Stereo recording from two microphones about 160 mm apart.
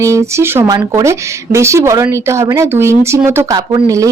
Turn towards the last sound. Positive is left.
turn(degrees=-20)  # may be behind; listen again after turning